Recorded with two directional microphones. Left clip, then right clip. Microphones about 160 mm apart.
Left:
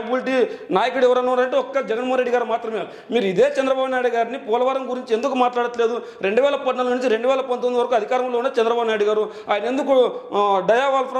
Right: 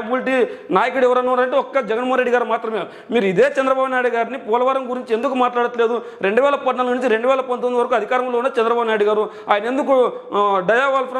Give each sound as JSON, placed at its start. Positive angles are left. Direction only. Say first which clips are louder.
{"t": 0.1, "sound": "a man's voice", "louder": "right 2 dB", "side_deg": -25}
{"t": 5.6, "sound": "a man's voice", "louder": "right 3 dB", "side_deg": -30}